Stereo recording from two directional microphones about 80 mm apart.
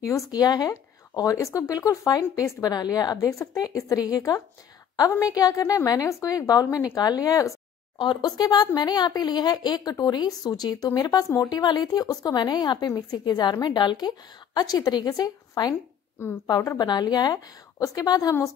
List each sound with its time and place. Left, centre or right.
0.0 s speech: left
3.2 s speech: left
8.0 s speech: left
16.7 s speech: left